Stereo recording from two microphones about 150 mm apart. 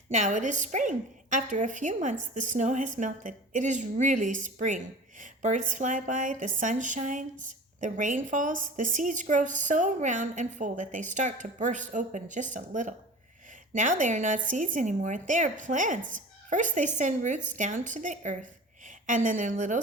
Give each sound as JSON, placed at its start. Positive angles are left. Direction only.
{"t": 0.1, "sound": "a woman's voice", "side_deg": -55}